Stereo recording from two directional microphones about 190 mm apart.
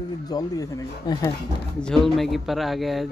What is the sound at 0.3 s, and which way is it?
Speech, 20° left (ahead or behind).